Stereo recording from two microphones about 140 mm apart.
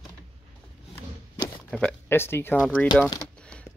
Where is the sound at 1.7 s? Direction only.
10° left (ahead or behind).